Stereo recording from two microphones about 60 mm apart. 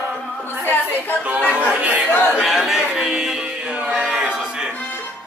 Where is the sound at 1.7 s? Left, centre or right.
Centre.